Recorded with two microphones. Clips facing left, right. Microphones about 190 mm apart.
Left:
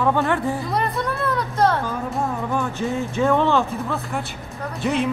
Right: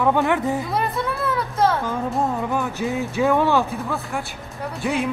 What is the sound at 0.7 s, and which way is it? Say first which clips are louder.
Music: even; 5° right (ahead or behind).